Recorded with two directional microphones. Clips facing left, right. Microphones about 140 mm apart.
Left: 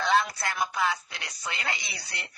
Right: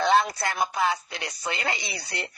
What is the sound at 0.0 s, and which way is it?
Speech, 25° right (ahead or behind).